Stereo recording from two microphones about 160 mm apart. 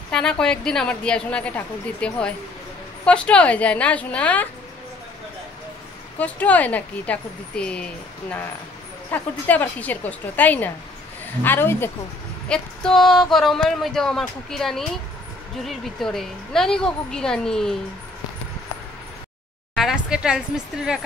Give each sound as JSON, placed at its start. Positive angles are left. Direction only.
{"t": 0.1, "sound": "speech", "side_deg": 5}
{"t": 6.1, "sound": "speech", "side_deg": 10}
{"t": 19.7, "sound": "speech", "side_deg": 0}